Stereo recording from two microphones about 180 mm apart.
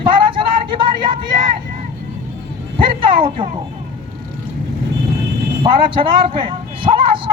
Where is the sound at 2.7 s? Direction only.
30° right (ahead or behind).